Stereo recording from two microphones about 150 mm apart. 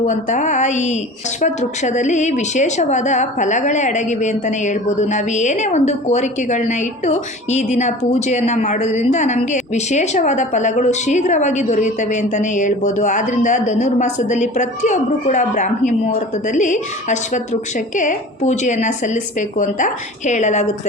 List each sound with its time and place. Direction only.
0.0 s speech: 55° left (ahead or behind)